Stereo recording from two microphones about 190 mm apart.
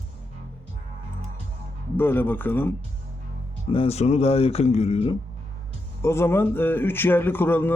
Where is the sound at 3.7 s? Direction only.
30° left (ahead or behind).